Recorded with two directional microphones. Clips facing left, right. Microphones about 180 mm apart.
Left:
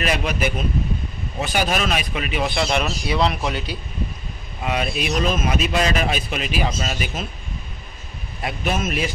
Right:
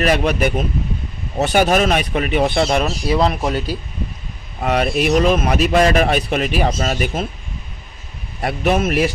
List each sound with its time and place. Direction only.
0.0 s speech: 55° right (ahead or behind)
1.7 s a man's voice: 50° right (ahead or behind)
8.4 s speech: 65° right (ahead or behind)